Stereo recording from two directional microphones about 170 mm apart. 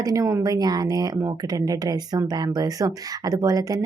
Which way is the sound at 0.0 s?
20° right (ahead or behind).